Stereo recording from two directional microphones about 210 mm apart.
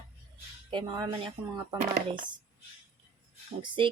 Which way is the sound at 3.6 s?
20° right (ahead or behind).